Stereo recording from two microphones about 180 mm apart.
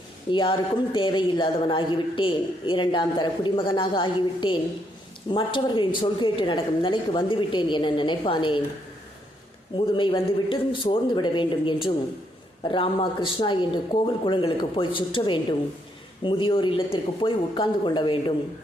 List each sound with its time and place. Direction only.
0.3 s a woman's voice: 25° left (ahead or behind)
9.7 s a woman's voice: 25° left (ahead or behind)